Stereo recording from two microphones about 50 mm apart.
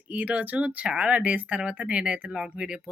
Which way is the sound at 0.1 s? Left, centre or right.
Right.